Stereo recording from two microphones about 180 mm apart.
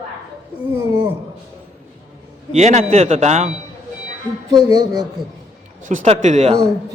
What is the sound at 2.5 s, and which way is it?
A man's voice, 35° right (ahead or behind).